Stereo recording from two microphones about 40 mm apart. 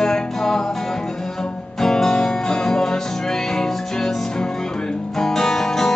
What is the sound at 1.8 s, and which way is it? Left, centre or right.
Music, centre.